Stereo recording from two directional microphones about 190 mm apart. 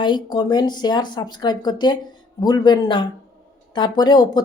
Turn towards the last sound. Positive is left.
turn(degrees=20)  # may be behind; listen again after turning